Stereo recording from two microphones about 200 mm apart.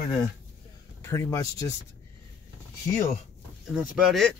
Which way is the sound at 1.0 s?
15° left (ahead or behind).